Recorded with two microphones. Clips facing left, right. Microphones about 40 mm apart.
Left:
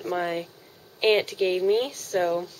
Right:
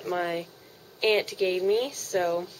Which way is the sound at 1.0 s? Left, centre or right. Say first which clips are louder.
Left 2 dB; centre.